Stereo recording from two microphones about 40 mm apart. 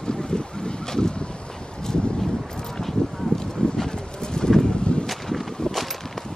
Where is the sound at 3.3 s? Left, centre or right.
Centre.